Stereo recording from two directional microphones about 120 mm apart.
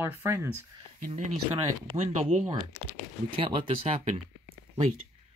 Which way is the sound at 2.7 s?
25° left (ahead or behind).